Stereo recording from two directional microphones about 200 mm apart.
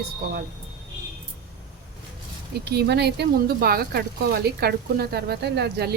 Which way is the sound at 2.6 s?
55° right (ahead or behind).